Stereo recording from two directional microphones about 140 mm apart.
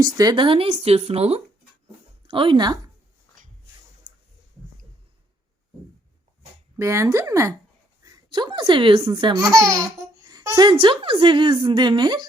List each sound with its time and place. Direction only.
0.0 s speech: 30° right (ahead or behind); by 1.4 s 50° right (ahead or behind)
2.2 s speech: 40° right (ahead or behind)
3.4 s dog: 70° right (ahead or behind)
6.7 s speech: 20° right (ahead or behind); by 9.3 s 35° right (ahead or behind)
9.3 s speech: 20° right (ahead or behind)
10.7 s a woman's voice: 35° right (ahead or behind)